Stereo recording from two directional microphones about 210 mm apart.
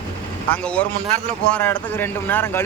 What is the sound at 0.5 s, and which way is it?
Speech, 5° left (ahead or behind).